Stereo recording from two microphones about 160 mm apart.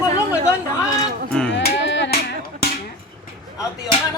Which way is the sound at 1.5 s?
90° left.